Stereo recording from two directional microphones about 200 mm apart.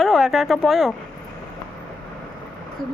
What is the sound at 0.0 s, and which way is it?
Speech, centre (ahead or behind).